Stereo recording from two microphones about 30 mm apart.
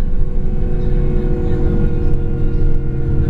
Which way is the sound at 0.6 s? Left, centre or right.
Centre.